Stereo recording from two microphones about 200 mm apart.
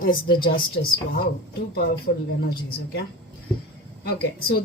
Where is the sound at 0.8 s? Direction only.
55° left (ahead or behind).